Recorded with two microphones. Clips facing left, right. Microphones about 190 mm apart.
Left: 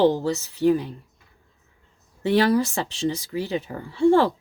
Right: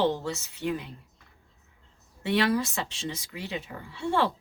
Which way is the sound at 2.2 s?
35° left (ahead or behind).